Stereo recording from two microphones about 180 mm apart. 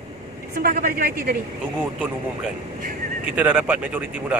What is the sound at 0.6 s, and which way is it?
Speech, 50° right (ahead or behind).